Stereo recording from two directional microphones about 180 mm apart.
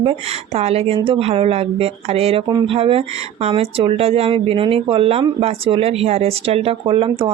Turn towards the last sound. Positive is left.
turn(degrees=-30)  # may be behind; listen again after turning